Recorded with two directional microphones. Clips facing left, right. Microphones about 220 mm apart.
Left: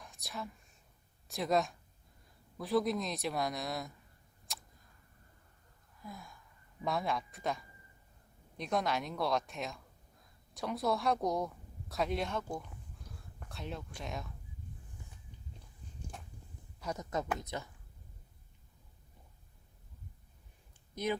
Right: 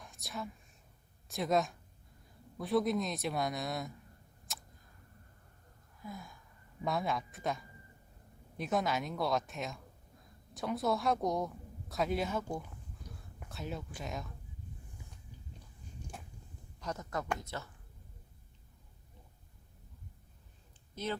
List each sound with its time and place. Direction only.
0.0 s whispering: centre (ahead or behind)
1.3 s a woman's voice: centre (ahead or behind)
4.5 s tick-tock: centre (ahead or behind)
6.0 s gasp: centre (ahead or behind)
6.8 s a woman's voice: centre (ahead or behind)
16.8 s speech: 15° left (ahead or behind)
20.9 s speech: 15° left (ahead or behind)